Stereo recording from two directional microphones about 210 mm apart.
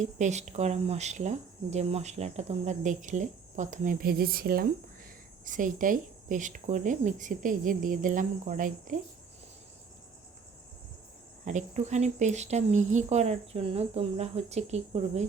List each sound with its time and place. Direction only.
0.0 s speech: 35° right (ahead or behind)
11.4 s speech: 35° right (ahead or behind)